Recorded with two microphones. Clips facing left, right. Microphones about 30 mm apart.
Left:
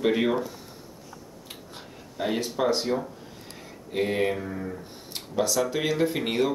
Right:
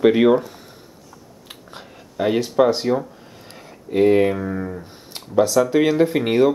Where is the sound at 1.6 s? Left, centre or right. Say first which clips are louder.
Right 3 dB; right.